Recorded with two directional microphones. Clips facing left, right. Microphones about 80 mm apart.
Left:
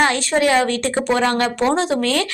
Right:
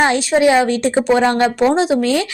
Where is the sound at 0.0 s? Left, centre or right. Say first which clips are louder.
Right 4 dB; centre.